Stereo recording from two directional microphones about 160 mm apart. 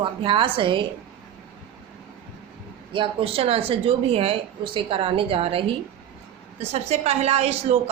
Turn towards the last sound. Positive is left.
turn(degrees=-40)  # may be behind; listen again after turning